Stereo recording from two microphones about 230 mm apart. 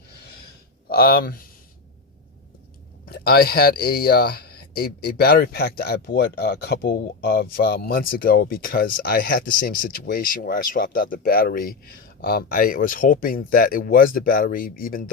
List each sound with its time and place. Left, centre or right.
0.9 s speech: left
3.1 s speech: left